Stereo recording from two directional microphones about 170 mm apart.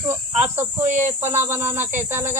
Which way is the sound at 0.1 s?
15° right (ahead or behind).